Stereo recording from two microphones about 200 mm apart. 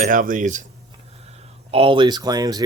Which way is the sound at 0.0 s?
40° right (ahead or behind).